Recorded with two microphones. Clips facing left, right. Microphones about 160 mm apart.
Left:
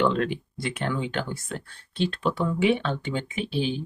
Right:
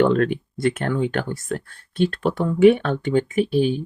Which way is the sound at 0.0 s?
50° right (ahead or behind).